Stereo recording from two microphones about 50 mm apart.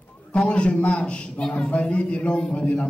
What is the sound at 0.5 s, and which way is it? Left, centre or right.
A man's voice, left.